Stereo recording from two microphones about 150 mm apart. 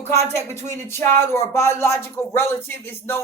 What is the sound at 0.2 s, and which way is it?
Speech, 45° right (ahead or behind).